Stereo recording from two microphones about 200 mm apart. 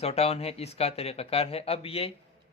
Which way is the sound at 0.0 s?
30° left (ahead or behind).